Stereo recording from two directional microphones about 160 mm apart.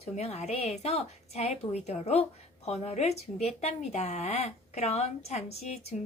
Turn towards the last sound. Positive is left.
turn(degrees=40)  # may be behind; listen again after turning